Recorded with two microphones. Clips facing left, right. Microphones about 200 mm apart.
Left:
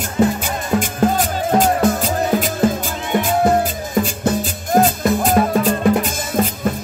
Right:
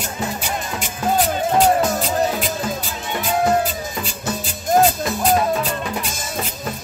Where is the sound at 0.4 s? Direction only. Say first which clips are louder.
Left 6 dB; 50° left (ahead or behind).